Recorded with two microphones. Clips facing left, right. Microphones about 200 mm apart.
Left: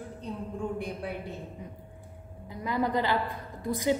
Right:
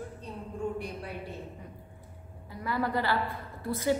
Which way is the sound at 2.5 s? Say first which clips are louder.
Left 2 dB; 20° left (ahead or behind).